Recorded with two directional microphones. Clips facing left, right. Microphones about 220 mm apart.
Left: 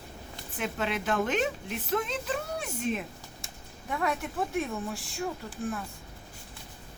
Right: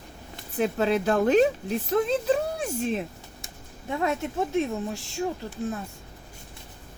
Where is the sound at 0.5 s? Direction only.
35° right (ahead or behind).